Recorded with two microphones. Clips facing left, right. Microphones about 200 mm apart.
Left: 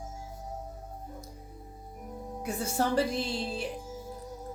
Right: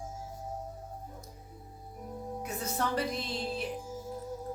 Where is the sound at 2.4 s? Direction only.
30° left (ahead or behind).